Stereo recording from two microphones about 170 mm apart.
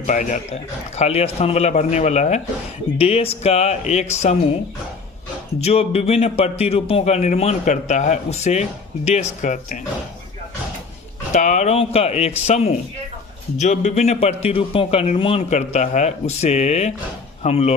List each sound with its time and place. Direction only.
0.0 s a man's voice: 45° left (ahead or behind)
5.5 s a man's voice: 40° left (ahead or behind)
11.3 s a man's voice: 45° left (ahead or behind)